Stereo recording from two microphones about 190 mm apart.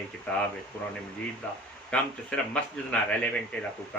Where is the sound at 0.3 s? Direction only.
5° left (ahead or behind).